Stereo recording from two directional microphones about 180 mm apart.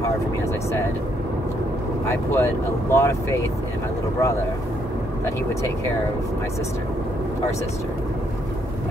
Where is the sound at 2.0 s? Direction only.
15° left (ahead or behind).